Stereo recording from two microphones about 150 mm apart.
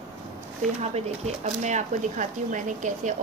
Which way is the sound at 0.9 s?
45° right (ahead or behind).